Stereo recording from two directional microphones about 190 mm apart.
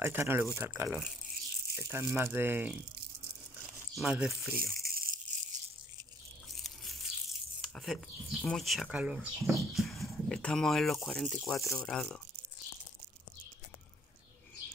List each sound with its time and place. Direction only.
0.0 s speech: 10° right (ahead or behind)
3.9 s speech: 5° right (ahead or behind)
4.7 s a sound: 50° right (ahead or behind)
6.6 s speech: centre (ahead or behind)
11.5 s speech: 15° left (ahead or behind)
11.9 s speech: 5° left (ahead or behind)